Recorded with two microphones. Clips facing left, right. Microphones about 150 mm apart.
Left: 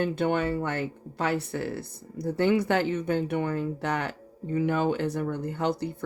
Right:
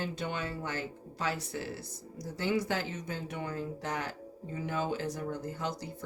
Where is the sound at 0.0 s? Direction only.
60° left (ahead or behind).